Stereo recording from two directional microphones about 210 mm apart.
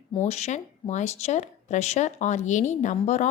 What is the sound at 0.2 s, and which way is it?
A woman's voice, 30° left (ahead or behind).